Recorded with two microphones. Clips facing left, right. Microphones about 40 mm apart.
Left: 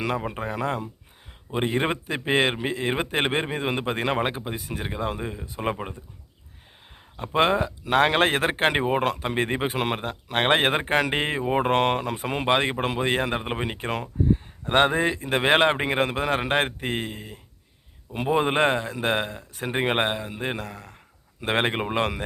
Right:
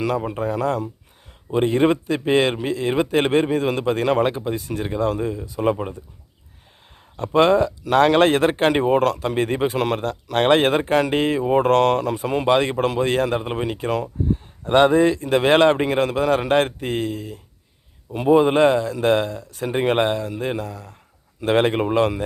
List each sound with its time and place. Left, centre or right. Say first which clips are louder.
0.0 s a man's voice: right 5 dB; left
1.5 s a man's voice: right 7 dB; left
7.2 s a man's voice: right 6 dB; left
8.8 s a man's voice: right 6 dB; left
9.0 s a man's voice: right 4 dB; left
18.1 s a man's voice: right 7 dB; left